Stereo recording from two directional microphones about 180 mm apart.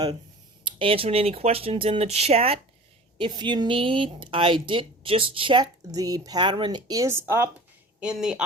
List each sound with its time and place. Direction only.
0.6 s speech: 30° right (ahead or behind); by 8.4 s 5° right (ahead or behind)